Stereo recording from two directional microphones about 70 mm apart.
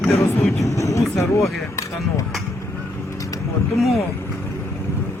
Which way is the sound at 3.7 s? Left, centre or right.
Centre.